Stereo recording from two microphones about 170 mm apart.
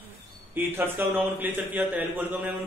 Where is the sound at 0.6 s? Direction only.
10° right (ahead or behind).